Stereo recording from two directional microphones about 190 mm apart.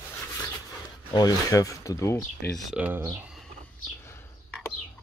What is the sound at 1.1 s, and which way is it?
Speech, 20° left (ahead or behind).